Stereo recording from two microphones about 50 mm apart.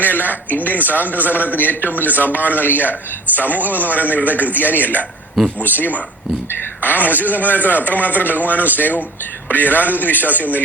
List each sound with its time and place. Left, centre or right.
0.0 s a man's voice: left